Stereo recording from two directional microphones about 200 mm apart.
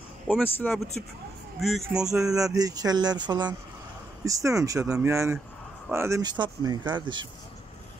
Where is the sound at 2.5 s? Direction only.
20° right (ahead or behind).